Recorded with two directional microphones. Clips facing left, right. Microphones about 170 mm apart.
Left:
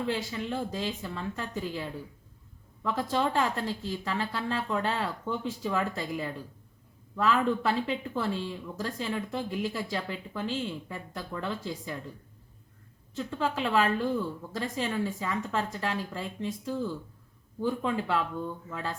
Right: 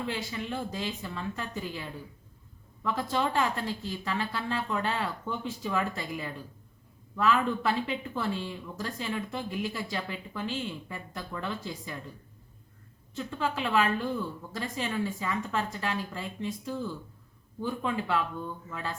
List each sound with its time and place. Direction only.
0.1 s speech: 35° left (ahead or behind)
13.1 s speech: 35° left (ahead or behind)
17.7 s speech: 35° left (ahead or behind)